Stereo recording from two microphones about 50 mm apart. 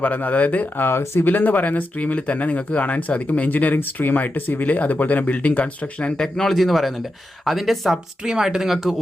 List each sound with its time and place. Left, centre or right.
0.0 s speech: left
0.9 s speech: left
1.2 s speech: left
6.2 s speech: centre